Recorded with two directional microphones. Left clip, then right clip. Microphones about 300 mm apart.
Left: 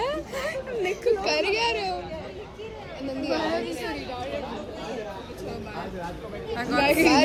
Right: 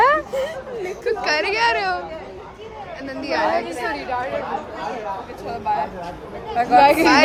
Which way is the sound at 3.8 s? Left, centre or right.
Centre.